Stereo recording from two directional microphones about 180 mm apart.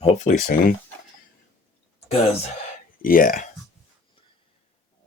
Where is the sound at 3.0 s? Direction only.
50° left (ahead or behind).